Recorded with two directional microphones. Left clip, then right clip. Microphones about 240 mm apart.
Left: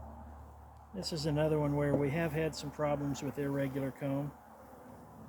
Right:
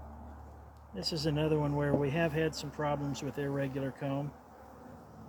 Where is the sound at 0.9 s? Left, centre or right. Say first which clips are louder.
Right 1 dB; centre.